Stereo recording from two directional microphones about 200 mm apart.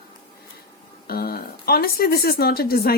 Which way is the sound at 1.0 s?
50° left (ahead or behind).